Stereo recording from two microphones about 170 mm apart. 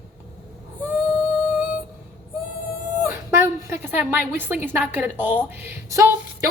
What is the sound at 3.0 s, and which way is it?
A woman's voice, 15° right (ahead or behind).